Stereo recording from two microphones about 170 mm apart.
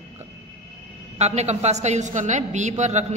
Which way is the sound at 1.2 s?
40° right (ahead or behind).